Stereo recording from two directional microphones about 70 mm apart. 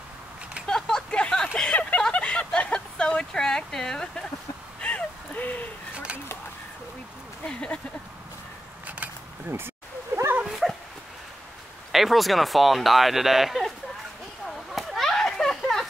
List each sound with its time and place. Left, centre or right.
0.7 s vehicle: centre
4.7 s a sound: centre
7.4 s speech: centre
10.4 s dog: centre
11.9 s speech: centre
14.8 s a sound: centre